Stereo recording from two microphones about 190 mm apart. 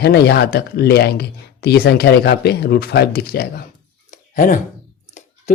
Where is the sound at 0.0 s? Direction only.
60° left (ahead or behind).